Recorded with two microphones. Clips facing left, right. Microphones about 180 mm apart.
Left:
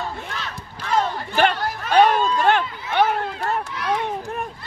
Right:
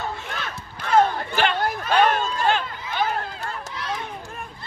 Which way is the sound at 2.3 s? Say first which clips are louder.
Left 4 dB; 60° left (ahead or behind).